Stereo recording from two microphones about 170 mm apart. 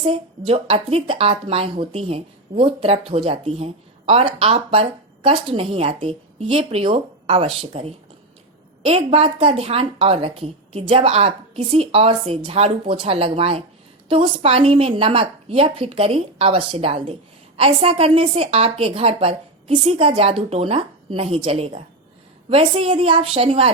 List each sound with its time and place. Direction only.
0.0 s speech: 30° right (ahead or behind)